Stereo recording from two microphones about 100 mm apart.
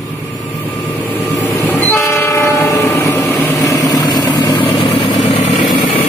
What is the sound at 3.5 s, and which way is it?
Vehicle, 35° left (ahead or behind).